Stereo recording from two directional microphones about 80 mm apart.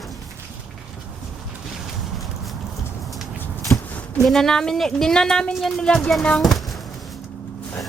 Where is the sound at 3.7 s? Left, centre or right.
Left.